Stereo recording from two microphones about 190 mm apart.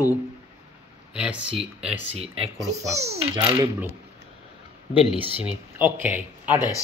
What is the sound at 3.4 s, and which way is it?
Speech, 30° right (ahead or behind).